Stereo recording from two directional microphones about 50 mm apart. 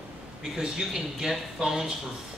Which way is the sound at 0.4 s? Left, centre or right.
Centre.